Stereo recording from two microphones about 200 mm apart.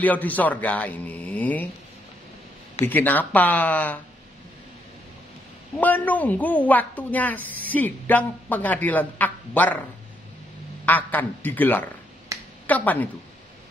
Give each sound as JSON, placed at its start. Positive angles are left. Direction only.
{"t": 0.0, "sound": "a woman's voice", "side_deg": 10}
{"t": 2.8, "sound": "a woman's voice", "side_deg": 10}
{"t": 5.8, "sound": "a woman's voice", "side_deg": 10}
{"t": 10.9, "sound": "a woman's voice", "side_deg": 10}
{"t": 12.3, "sound": "a sound", "side_deg": -15}
{"t": 12.6, "sound": "a woman's voice", "side_deg": 10}